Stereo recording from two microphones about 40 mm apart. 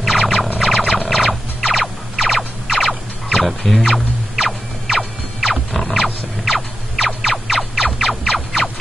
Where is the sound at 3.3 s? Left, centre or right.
Centre.